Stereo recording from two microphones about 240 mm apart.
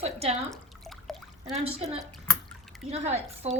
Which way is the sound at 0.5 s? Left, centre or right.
Centre.